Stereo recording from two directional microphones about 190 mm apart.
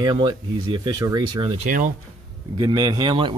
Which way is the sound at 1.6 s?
45° right (ahead or behind).